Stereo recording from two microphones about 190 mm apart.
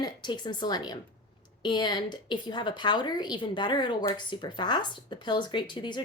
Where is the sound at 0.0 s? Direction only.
25° left (ahead or behind).